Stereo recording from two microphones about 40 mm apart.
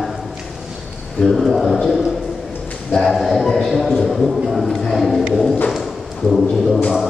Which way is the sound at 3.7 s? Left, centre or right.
Centre.